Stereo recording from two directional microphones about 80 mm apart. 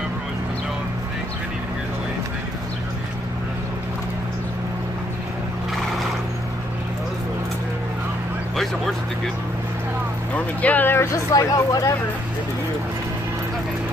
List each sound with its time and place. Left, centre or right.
10.3 s speech: centre
11.3 s speech: left